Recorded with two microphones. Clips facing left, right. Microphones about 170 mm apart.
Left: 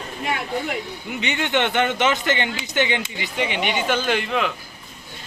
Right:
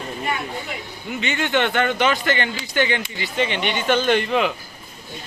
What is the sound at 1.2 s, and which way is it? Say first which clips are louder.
A man's voice: right 1 dB; 20° left (ahead or behind).